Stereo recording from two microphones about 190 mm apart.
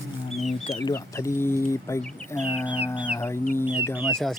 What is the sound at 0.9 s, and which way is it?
Speech, 15° left (ahead or behind).